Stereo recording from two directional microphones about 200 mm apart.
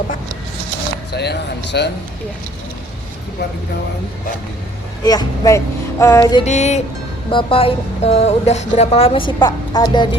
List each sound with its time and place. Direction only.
1.1 s speech: 55° left (ahead or behind)
5.0 s speech: 20° left (ahead or behind)
6.4 s music: 35° left (ahead or behind)
7.3 s speech: 25° left (ahead or behind)